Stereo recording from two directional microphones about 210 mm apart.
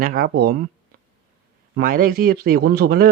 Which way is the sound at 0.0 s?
45° right (ahead or behind).